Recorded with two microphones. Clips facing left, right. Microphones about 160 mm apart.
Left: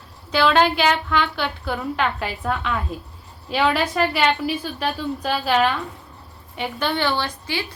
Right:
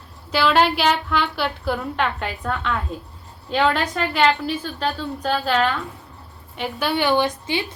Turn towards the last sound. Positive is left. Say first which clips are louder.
# right 5 dB
turn(degrees=-20)  # may be behind; listen again after turning